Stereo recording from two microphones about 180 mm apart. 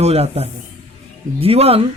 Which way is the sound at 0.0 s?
35° right (ahead or behind).